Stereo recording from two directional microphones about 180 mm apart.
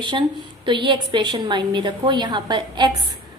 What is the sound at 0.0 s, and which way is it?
A woman's voice, 25° right (ahead or behind).